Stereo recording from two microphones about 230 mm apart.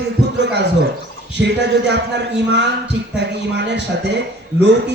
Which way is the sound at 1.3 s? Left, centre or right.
Right.